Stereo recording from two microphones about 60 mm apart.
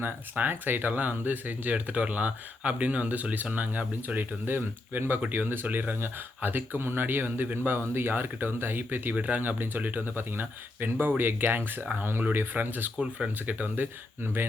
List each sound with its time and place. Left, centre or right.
0.3 s speech: right
9.1 s speech: right
13.0 s speech: centre
13.4 s speech: right